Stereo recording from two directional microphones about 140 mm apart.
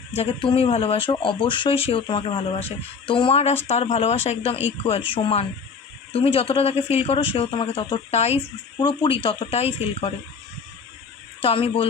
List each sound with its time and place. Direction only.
0.1 s speech: 40° left (ahead or behind)
8.8 s speech: 35° left (ahead or behind)
11.4 s speech: 40° left (ahead or behind)